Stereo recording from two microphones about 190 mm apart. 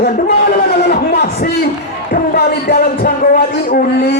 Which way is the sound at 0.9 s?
55° left (ahead or behind).